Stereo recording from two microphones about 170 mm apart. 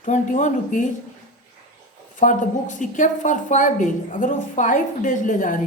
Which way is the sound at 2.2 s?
50° left (ahead or behind).